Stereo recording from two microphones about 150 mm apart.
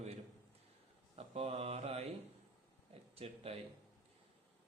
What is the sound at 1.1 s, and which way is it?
Mantra, 40° right (ahead or behind).